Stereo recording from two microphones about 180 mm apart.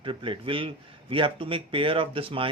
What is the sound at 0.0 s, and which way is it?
Speech, 30° right (ahead or behind).